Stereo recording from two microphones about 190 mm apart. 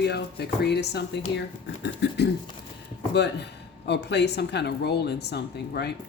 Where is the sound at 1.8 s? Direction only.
65° left (ahead or behind).